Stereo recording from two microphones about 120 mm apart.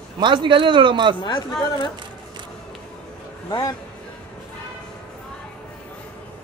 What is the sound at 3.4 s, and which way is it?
Speech, 30° left (ahead or behind).